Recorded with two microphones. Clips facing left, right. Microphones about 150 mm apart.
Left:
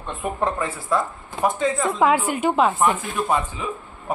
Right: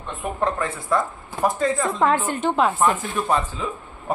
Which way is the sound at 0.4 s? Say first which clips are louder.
Right 1 dB; 5° left (ahead or behind).